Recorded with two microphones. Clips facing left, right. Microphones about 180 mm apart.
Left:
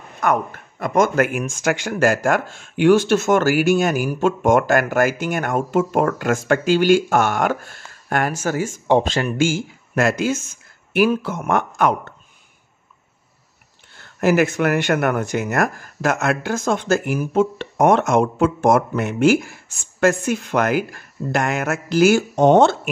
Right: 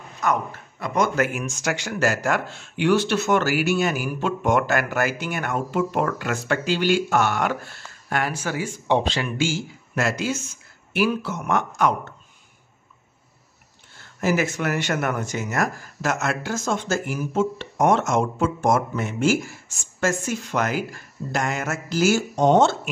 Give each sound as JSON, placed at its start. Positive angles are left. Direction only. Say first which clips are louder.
{"t": 0.2, "sound": "speech", "louder": "left 4 dB", "side_deg": 55}
{"t": 14.2, "sound": "speech", "louder": "left 6 dB", "side_deg": 60}